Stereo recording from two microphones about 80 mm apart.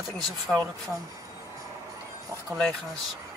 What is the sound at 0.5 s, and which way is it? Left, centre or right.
Speech, right.